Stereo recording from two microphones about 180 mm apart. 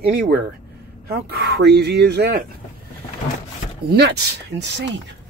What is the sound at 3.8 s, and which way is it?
Speech, 65° right (ahead or behind).